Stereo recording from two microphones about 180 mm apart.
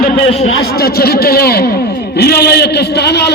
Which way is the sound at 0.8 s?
60° left (ahead or behind).